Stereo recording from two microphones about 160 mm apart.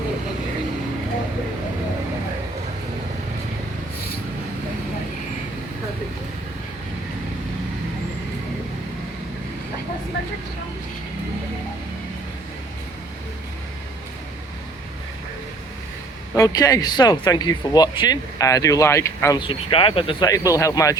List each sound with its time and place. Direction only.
16.3 s speech: 20° left (ahead or behind)
19.4 s speech: 30° left (ahead or behind)